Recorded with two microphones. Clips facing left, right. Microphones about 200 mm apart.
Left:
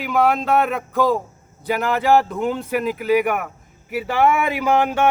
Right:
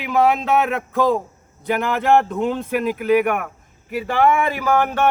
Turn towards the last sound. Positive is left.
turn(degrees=10)  # may be behind; listen again after turning